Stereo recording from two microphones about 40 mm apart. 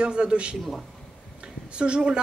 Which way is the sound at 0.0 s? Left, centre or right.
Right.